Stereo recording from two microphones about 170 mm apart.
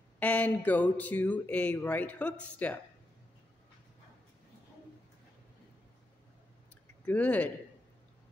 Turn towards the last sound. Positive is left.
turn(degrees=10)  # may be behind; listen again after turning